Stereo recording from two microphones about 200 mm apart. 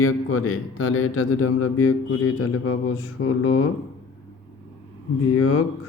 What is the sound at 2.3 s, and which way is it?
Speech, 90° left.